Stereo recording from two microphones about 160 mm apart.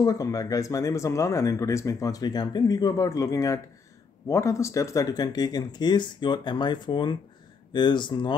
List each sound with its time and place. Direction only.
0.0 s speech: 20° left (ahead or behind)